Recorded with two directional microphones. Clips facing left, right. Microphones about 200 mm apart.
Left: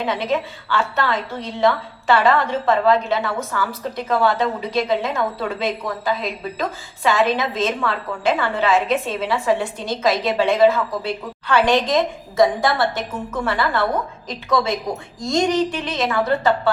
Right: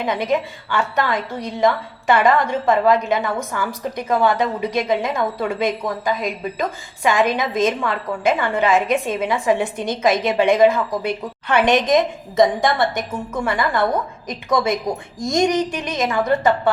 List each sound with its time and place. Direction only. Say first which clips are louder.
0.0 s a woman's voice: right 1 dB; 15° right (ahead or behind)
6.6 s a woman's voice: right 1 dB; 15° right (ahead or behind)